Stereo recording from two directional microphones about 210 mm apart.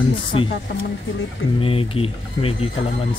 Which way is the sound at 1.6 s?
25° left (ahead or behind).